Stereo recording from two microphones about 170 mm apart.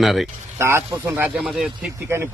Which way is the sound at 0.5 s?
15° right (ahead or behind).